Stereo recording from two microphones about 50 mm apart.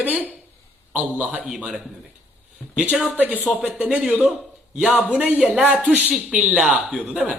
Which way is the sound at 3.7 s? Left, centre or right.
Right.